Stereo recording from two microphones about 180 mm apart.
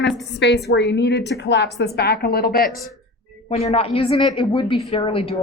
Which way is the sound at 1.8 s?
65° left (ahead or behind).